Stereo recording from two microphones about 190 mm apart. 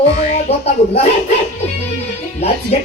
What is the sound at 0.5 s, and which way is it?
Speech, 30° left (ahead or behind).